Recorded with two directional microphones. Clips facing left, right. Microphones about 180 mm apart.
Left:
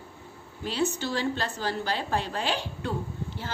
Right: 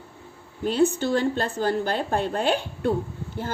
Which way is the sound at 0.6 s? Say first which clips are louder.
Right 7 dB; 50° right (ahead or behind).